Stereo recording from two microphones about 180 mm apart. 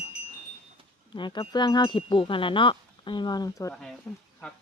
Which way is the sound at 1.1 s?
25° left (ahead or behind).